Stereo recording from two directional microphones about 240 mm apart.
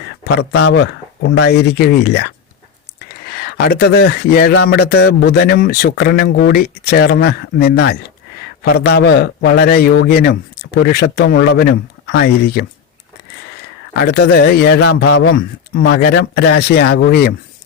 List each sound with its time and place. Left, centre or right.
0.6 s speech: left
14.0 s speech: left